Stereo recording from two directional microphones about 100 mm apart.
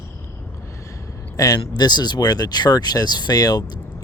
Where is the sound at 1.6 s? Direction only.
45° left (ahead or behind).